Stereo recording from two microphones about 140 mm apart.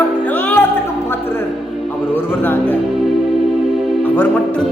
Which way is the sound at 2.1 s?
15° left (ahead or behind).